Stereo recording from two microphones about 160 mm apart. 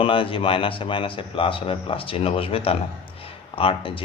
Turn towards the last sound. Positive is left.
turn(degrees=35)  # may be behind; listen again after turning